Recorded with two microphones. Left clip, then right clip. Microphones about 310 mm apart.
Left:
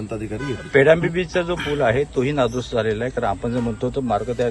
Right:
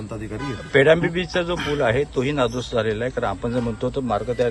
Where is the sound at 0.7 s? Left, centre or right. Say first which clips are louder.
Left 1 dB; centre.